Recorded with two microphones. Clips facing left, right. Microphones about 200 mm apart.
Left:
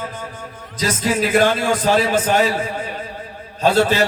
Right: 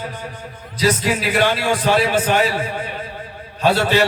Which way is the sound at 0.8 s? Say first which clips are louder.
Right 1 dB; 45° left (ahead or behind).